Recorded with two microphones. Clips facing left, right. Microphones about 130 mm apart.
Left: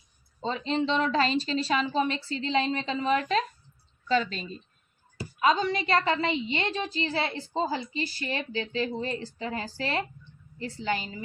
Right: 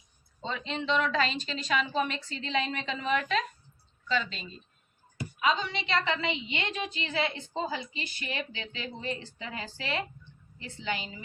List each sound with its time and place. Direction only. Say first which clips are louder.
0.4 s a woman's voice: left 5 dB; 35° left (ahead or behind)